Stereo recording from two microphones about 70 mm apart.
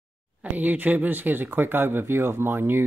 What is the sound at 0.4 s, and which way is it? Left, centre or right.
Speech, right.